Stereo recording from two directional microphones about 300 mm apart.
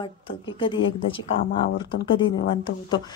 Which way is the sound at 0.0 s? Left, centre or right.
Centre.